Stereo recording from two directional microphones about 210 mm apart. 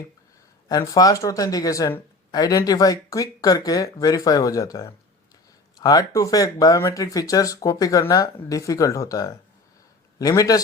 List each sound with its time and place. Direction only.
0.7 s speech: 15° left (ahead or behind)